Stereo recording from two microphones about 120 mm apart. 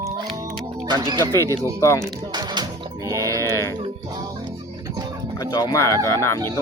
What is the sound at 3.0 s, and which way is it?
Music, 30° right (ahead or behind).